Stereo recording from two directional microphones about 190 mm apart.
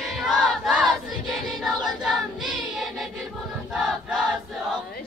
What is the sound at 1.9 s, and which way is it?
Choir, centre (ahead or behind).